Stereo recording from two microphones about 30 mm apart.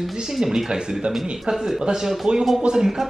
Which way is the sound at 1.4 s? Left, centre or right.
Centre.